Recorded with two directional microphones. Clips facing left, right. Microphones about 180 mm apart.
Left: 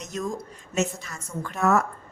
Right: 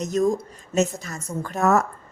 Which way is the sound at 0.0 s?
40° right (ahead or behind).